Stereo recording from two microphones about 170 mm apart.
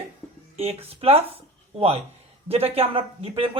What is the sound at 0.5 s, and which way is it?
A woman's voice, 35° right (ahead or behind).